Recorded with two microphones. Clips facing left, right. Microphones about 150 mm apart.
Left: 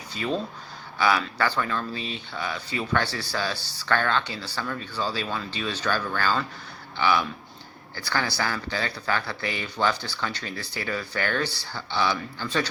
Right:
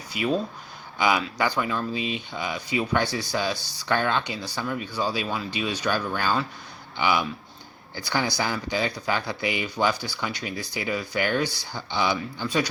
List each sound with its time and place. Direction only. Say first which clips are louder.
0.1 s a man's voice: right 3 dB; 10° right (ahead or behind)